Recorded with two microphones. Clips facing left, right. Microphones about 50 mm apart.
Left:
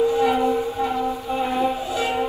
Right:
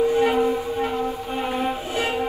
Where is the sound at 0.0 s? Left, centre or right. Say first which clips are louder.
Even; right.